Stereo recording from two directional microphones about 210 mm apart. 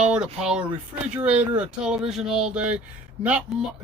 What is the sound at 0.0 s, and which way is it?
Speech, 5° right (ahead or behind).